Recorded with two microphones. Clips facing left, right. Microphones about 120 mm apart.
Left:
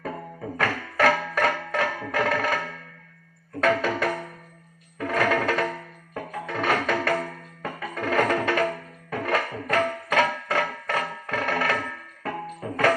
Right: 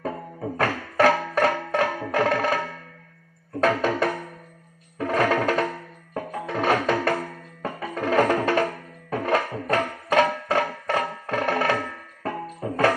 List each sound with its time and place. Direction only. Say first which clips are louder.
0.5 s music: right 3 dB; 30° right (ahead or behind)
3.6 s music: right 1 dB; 35° right (ahead or behind)